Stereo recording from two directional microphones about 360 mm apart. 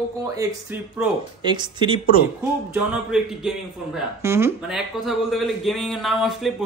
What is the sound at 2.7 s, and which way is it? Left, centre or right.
Speech, centre.